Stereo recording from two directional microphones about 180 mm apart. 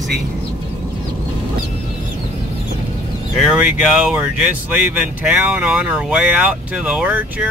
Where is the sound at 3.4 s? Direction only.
5° right (ahead or behind).